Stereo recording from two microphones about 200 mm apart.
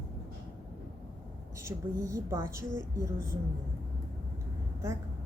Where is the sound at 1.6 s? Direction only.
15° right (ahead or behind).